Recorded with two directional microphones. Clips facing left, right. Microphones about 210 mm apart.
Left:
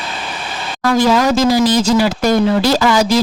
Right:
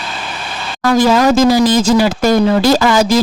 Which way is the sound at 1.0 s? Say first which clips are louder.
Right 3 dB; 45° right (ahead or behind).